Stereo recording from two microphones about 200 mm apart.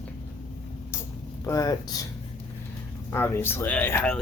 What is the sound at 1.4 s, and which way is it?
Speech, 15° left (ahead or behind).